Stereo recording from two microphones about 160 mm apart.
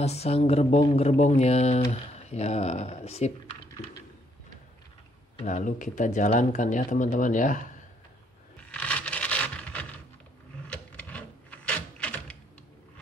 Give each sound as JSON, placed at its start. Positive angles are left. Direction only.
{"t": 0.0, "sound": "speech", "side_deg": 40}
{"t": 5.4, "sound": "speech", "side_deg": 50}
{"t": 8.5, "sound": "scrape", "side_deg": 10}
{"t": 10.7, "sound": "a sound", "side_deg": 10}